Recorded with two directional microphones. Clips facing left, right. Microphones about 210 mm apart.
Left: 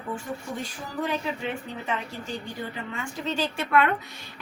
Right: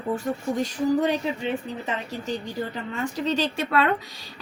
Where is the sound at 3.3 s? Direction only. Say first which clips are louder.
Left 1 dB; 35° right (ahead or behind).